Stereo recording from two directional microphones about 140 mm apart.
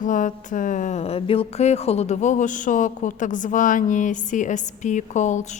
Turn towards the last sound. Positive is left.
turn(degrees=60)  # may be behind; listen again after turning